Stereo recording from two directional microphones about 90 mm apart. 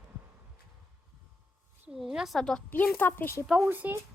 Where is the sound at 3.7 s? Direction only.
20° right (ahead or behind).